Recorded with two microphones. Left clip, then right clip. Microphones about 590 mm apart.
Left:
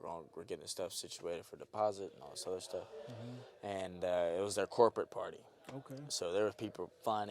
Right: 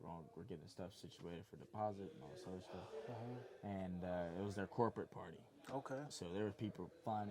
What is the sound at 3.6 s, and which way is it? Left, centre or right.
Speech, left.